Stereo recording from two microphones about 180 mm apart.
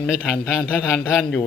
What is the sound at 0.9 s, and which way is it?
Speech, 10° left (ahead or behind).